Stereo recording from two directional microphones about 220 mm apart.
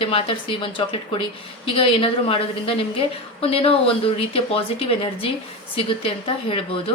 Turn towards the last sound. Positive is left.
turn(degrees=25)  # may be behind; listen again after turning